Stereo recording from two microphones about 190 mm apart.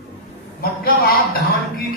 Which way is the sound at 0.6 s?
50° left (ahead or behind).